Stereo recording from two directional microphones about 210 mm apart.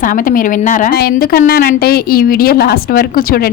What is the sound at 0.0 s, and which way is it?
A woman's voice, 40° left (ahead or behind).